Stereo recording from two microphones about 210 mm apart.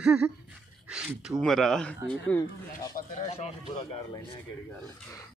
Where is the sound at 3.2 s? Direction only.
30° left (ahead or behind).